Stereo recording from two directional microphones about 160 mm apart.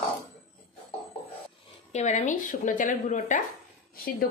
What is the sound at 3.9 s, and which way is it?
Speech, 65° left (ahead or behind).